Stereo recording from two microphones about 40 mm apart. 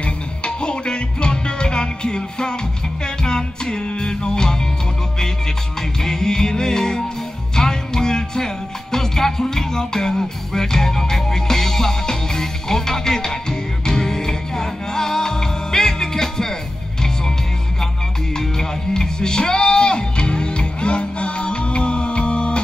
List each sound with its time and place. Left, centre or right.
0.0 s music: left
5.8 s music: centre
18.3 s music: centre